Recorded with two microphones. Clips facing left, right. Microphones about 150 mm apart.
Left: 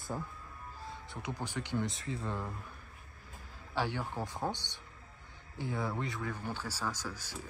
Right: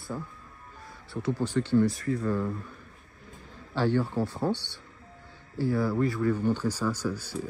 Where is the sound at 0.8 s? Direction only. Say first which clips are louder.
Right 8 dB; 20° left (ahead or behind).